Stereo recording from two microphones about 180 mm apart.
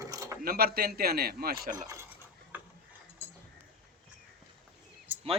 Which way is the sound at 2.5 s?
10° right (ahead or behind).